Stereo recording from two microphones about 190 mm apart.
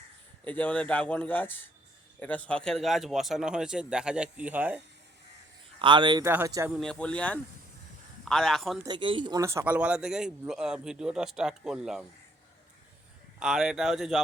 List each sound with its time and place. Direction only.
0.4 s speech: 10° left (ahead or behind); by 4.8 s 10° right (ahead or behind)
5.8 s a man's voice: 25° right (ahead or behind)
6.7 s speech: 5° left (ahead or behind)
8.8 s speech: 25° right (ahead or behind); by 12.0 s 5° right (ahead or behind)
13.4 s speech: 5° right (ahead or behind)